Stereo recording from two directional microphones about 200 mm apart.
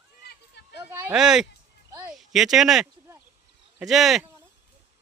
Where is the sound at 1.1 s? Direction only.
Centre (ahead or behind).